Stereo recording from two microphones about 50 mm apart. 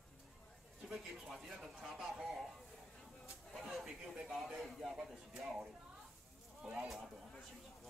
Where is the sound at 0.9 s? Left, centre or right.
Centre.